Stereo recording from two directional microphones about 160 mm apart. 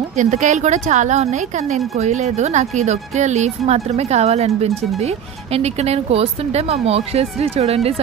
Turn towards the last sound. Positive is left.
turn(degrees=-40)  # may be behind; listen again after turning